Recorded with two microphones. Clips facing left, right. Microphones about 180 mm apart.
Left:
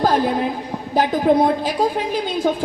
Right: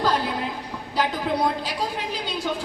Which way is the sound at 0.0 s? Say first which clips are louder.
Left 6 dB; 50° left (ahead or behind).